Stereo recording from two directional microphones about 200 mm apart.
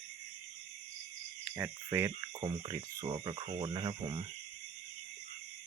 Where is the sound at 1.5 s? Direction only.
10° right (ahead or behind).